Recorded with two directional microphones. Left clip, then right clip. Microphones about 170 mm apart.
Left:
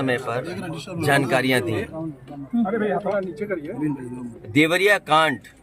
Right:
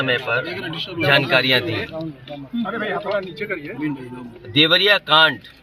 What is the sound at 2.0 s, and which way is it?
Speech, 30° right (ahead or behind).